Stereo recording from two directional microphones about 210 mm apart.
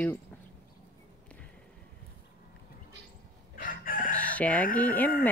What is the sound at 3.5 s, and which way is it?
Chicken, 40° left (ahead or behind).